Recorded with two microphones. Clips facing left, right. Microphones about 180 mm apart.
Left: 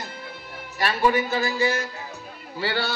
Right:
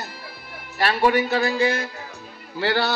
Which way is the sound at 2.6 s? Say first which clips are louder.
Right 4 dB; 65° right (ahead or behind).